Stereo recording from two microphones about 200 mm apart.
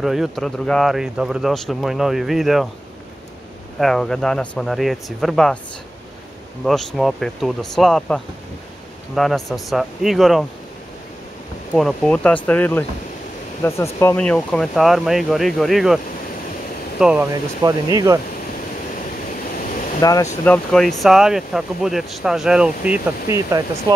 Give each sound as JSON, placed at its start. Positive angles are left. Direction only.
{"t": 0.0, "sound": "speech", "side_deg": 0}
{"t": 3.8, "sound": "speech", "side_deg": 0}
{"t": 6.6, "sound": "speech", "side_deg": 0}
{"t": 11.7, "sound": "speech", "side_deg": 0}
{"t": 17.0, "sound": "speech", "side_deg": -10}
{"t": 20.0, "sound": "speech", "side_deg": 15}
{"t": 20.4, "sound": "speech", "side_deg": 5}